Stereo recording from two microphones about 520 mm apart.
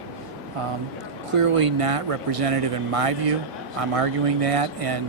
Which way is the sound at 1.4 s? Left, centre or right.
Right.